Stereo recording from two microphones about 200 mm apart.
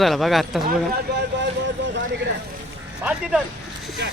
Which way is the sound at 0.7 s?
55° right (ahead or behind).